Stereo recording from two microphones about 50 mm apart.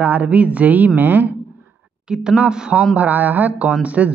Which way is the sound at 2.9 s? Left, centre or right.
Right.